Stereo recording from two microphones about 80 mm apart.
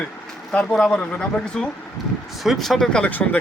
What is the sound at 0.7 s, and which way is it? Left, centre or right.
A man's voice, centre.